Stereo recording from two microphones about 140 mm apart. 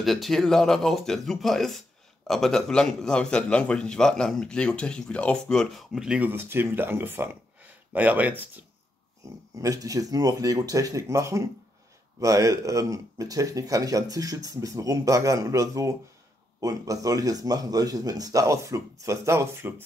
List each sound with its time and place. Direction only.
0.0 s a man's voice: centre (ahead or behind)
9.6 s speech: 25° right (ahead or behind)